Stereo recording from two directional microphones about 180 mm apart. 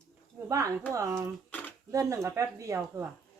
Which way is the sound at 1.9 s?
15° right (ahead or behind).